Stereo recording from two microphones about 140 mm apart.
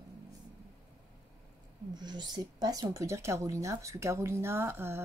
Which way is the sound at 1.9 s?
30° right (ahead or behind).